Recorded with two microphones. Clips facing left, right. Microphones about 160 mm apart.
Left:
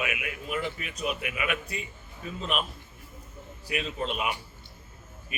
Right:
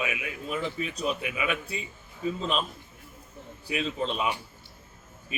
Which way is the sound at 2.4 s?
30° right (ahead or behind).